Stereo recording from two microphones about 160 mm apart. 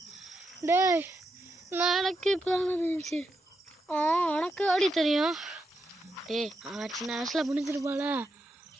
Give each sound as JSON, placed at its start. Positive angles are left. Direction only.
{"t": 0.6, "sound": "speech", "side_deg": -20}
{"t": 1.7, "sound": "speech", "side_deg": -5}
{"t": 7.7, "sound": "speech", "side_deg": -15}